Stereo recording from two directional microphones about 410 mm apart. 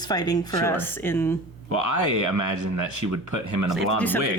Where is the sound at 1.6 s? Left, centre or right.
Right.